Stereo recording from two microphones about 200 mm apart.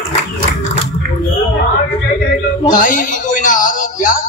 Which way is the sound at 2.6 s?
40° left (ahead or behind).